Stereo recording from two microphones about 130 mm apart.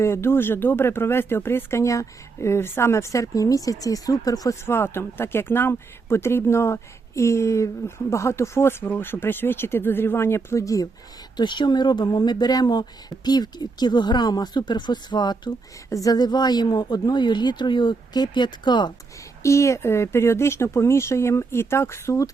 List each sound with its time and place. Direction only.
0.0 s speech: 20° left (ahead or behind); by 18.9 s 35° left (ahead or behind)
19.4 s speech: 20° left (ahead or behind)